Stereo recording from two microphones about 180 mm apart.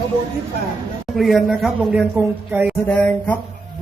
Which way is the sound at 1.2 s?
Centre (ahead or behind).